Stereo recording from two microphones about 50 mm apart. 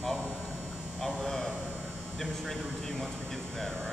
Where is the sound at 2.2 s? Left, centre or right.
Centre.